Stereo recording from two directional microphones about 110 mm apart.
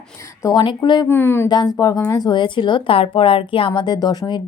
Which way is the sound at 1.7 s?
35° left (ahead or behind).